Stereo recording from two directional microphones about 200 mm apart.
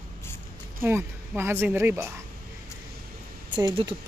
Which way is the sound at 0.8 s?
10° right (ahead or behind).